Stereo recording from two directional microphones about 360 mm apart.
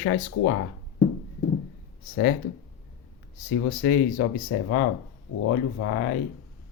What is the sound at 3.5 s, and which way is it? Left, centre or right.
Speech, left.